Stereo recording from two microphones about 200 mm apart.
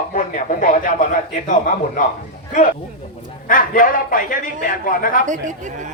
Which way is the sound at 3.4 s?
40° left (ahead or behind).